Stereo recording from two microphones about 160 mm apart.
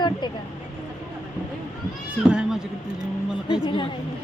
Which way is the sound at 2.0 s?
5° right (ahead or behind).